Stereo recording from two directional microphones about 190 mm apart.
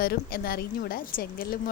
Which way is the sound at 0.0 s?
55° left (ahead or behind).